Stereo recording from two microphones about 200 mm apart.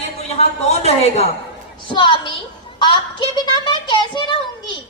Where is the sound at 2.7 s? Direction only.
25° left (ahead or behind).